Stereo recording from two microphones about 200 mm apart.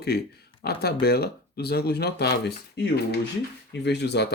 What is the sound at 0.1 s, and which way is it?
Speech, 55° left (ahead or behind).